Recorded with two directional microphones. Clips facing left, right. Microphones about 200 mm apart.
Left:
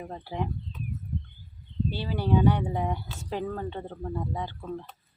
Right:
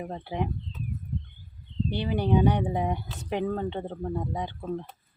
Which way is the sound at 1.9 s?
20° right (ahead or behind).